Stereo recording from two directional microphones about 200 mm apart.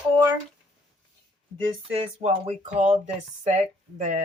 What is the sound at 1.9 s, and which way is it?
Speech, 30° right (ahead or behind).